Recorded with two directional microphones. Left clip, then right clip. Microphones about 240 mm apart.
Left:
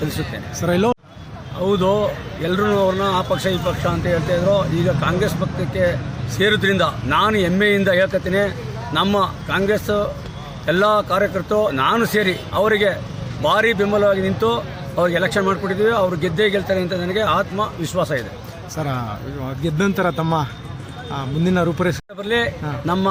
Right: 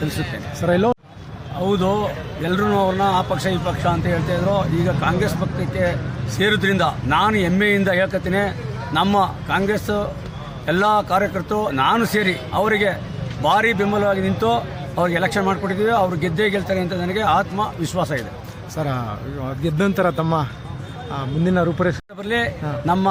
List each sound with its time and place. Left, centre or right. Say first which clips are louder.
0.6 s a man's voice: even; centre
6.3 s a man's voice: left 2 dB; centre